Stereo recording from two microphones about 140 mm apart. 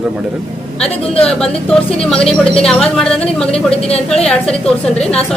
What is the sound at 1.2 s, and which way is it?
Speech, 5° left (ahead or behind).